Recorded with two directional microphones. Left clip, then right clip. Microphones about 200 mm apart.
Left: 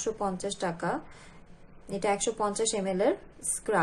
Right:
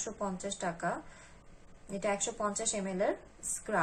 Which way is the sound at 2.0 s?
50° left (ahead or behind).